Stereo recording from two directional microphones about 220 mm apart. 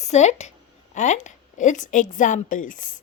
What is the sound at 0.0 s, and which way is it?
Speech, 30° left (ahead or behind).